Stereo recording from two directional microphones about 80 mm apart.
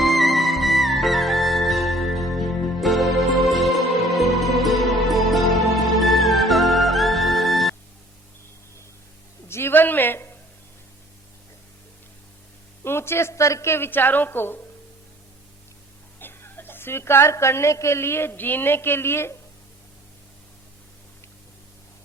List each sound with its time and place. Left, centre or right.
0.0 s music: centre
9.5 s a sound: left
12.8 s a woman's voice: left
16.2 s a woman's voice: left